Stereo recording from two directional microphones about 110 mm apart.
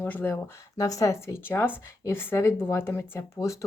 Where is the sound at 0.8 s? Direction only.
30° left (ahead or behind).